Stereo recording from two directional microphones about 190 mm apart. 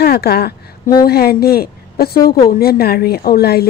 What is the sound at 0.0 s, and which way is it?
A woman's voice, 55° left (ahead or behind).